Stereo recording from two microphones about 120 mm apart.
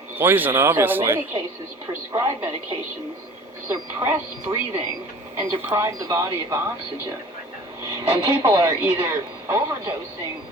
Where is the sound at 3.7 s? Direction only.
20° right (ahead or behind).